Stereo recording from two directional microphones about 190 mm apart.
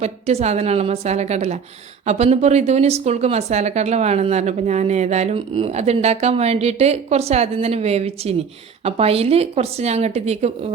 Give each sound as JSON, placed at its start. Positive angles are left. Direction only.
{"t": 0.0, "sound": "speech", "side_deg": -35}